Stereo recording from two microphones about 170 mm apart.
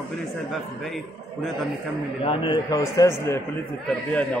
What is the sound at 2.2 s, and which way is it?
A man's voice, 30° left (ahead or behind).